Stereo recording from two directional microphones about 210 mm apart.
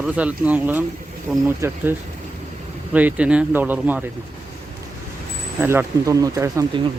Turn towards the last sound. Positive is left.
turn(degrees=-15)  # may be behind; listen again after turning